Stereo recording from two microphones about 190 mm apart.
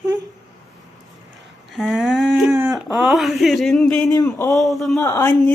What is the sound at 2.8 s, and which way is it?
Speech, centre (ahead or behind).